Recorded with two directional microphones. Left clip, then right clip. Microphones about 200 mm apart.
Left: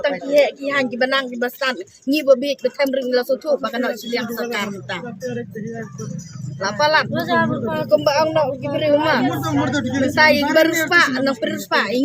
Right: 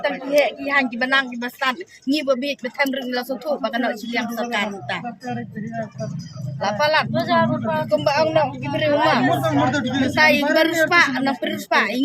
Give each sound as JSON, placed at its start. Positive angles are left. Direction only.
{"t": 0.0, "sound": "a woman's voice", "side_deg": -5}
{"t": 6.6, "sound": "speech", "side_deg": -5}
{"t": 9.4, "sound": "speech", "side_deg": -25}
{"t": 10.2, "sound": "a woman's voice", "side_deg": -5}